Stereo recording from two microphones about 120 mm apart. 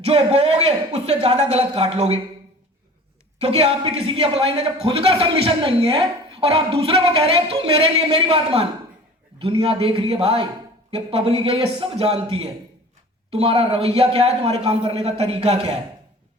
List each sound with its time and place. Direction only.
0.0 s a man's voice: 60° right (ahead or behind)
3.4 s a man's voice: 60° right (ahead or behind)